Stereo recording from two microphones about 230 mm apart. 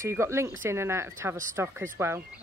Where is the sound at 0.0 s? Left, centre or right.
Centre.